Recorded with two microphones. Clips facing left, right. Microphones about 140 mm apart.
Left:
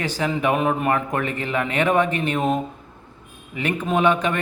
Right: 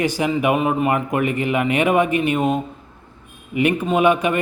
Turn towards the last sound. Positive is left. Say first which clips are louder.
# right 3 dB
turn(degrees=-10)  # may be behind; listen again after turning